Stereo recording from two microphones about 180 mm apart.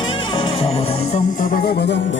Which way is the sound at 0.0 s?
25° left (ahead or behind).